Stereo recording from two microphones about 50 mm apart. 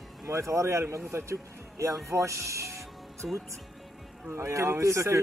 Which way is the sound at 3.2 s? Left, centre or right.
Centre.